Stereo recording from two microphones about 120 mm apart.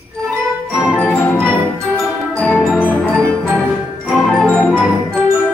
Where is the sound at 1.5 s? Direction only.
15° right (ahead or behind).